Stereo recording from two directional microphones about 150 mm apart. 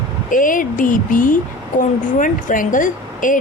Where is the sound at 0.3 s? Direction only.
65° left (ahead or behind).